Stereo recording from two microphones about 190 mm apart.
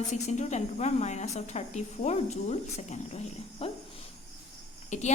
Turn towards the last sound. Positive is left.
turn(degrees=35)  # may be behind; listen again after turning